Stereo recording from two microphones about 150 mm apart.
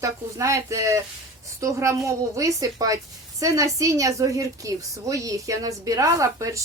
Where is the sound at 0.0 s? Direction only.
20° right (ahead or behind).